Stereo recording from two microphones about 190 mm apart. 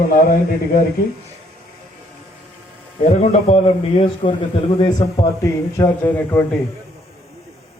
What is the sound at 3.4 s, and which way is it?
A man's voice, 30° left (ahead or behind).